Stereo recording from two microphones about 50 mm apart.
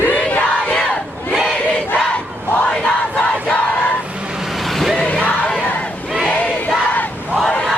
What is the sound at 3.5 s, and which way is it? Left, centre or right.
Battle cry, left.